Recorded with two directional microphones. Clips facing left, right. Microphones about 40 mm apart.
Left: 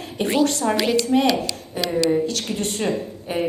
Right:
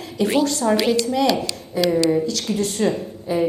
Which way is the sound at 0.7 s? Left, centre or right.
Left.